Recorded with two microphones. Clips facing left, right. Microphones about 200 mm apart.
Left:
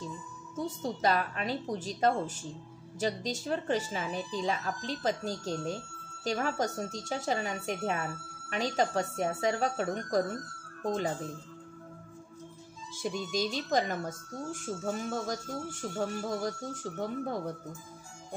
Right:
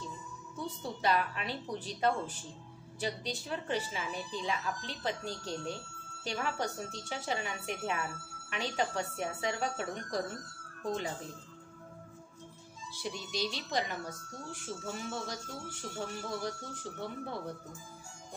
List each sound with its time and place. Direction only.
0.6 s speech: 40° left (ahead or behind)
12.9 s speech: 45° left (ahead or behind)